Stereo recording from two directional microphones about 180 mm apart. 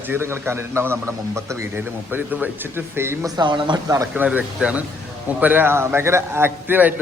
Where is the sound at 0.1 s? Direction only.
15° right (ahead or behind).